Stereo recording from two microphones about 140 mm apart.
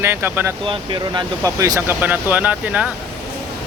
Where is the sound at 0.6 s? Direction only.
35° right (ahead or behind).